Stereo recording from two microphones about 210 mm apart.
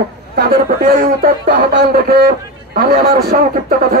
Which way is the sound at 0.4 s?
45° right (ahead or behind).